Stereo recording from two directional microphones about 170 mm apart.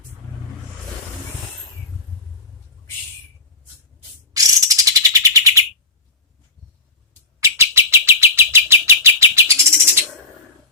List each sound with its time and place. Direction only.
4.4 s bird: 20° right (ahead or behind)
7.3 s bird: 15° right (ahead or behind)